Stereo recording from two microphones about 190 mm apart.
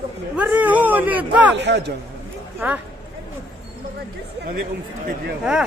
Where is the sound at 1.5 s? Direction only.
65° right (ahead or behind).